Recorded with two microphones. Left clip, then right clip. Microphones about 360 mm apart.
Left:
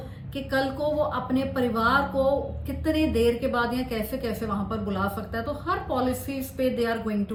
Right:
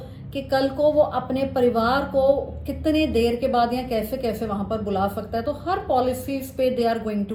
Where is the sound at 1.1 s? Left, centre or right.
Centre.